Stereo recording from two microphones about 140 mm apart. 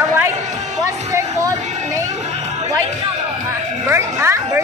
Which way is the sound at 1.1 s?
20° right (ahead or behind).